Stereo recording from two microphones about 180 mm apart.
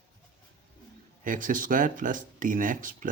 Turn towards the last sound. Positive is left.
turn(degrees=-45)  # may be behind; listen again after turning